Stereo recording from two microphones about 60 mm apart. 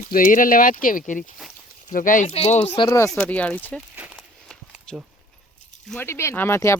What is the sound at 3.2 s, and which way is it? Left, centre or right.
Speech, left.